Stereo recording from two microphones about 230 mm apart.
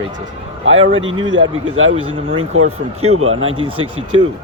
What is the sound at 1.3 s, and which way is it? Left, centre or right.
Speech, right.